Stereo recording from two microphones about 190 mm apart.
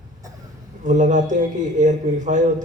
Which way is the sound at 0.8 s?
40° right (ahead or behind).